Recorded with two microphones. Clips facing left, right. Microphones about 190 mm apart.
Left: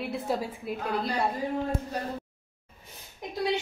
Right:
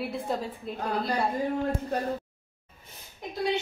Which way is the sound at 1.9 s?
50° right (ahead or behind).